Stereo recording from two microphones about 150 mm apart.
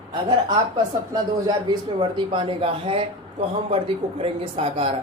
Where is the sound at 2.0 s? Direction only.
30° right (ahead or behind).